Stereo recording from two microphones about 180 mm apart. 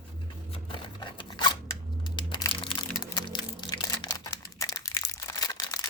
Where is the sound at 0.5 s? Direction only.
25° left (ahead or behind).